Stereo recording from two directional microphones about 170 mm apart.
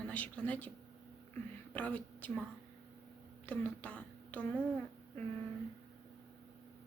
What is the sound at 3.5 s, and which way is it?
Speech, 5° left (ahead or behind).